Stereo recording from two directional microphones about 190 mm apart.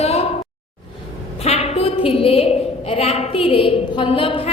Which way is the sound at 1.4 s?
35° left (ahead or behind).